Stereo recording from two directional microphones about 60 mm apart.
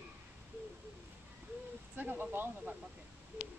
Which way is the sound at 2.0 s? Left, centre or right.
Right.